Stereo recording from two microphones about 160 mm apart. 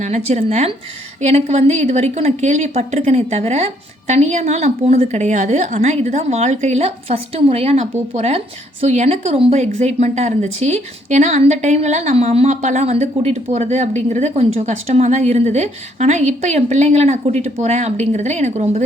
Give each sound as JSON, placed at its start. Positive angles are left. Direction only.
{"t": 0.0, "sound": "speech", "side_deg": -45}